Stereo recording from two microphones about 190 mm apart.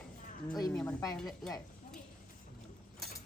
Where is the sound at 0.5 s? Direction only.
15° left (ahead or behind).